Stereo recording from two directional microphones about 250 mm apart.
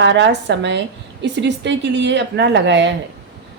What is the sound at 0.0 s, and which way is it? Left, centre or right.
Speech, right.